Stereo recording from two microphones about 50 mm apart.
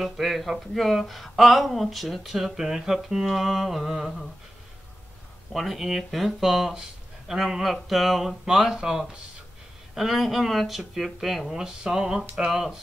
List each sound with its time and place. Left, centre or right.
0.0 s speech: centre
5.5 s speech: centre
9.9 s speech: centre